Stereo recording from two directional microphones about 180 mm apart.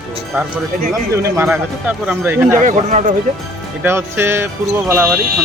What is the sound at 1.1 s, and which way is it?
Speech, 15° right (ahead or behind).